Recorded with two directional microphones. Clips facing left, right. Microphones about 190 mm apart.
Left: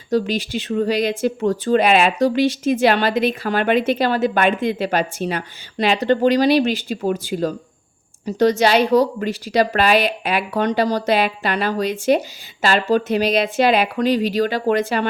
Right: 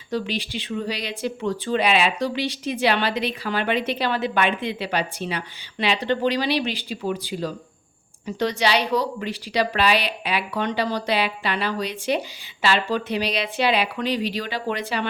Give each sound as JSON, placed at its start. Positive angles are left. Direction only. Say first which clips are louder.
{"t": 0.1, "sound": "speech", "louder": "left 7 dB", "side_deg": 45}